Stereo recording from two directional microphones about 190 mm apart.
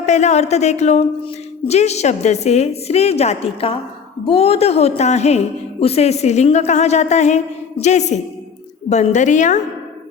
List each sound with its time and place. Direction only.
0.0 s a woman's voice: 35° left (ahead or behind)